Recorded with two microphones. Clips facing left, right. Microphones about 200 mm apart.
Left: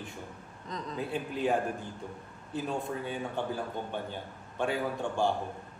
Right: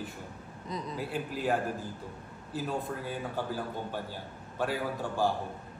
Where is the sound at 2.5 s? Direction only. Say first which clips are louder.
Left 1 dB; 5° right (ahead or behind).